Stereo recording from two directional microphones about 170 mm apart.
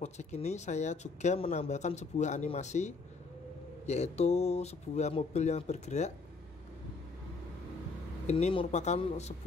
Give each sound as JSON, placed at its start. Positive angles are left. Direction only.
{"t": 0.0, "sound": "speech", "side_deg": 40}
{"t": 8.3, "sound": "speech", "side_deg": 40}